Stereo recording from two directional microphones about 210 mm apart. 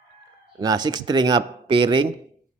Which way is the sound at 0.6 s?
20° right (ahead or behind).